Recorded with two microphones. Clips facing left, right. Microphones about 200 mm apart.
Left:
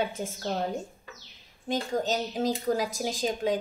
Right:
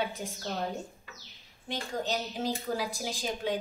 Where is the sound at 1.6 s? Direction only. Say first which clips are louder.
Left 6 dB; 45° left (ahead or behind).